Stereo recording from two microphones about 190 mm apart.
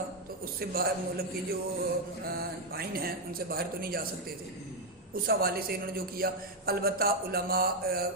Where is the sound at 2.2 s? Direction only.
55° right (ahead or behind).